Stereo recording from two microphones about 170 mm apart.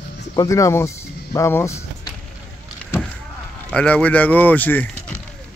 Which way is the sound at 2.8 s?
5° left (ahead or behind).